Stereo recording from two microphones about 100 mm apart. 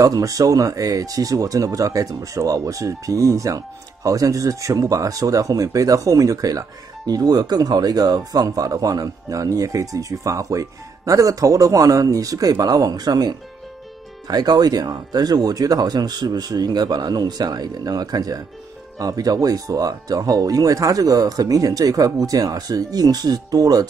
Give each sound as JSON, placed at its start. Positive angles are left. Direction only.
{"t": 0.0, "sound": "speech", "side_deg": -35}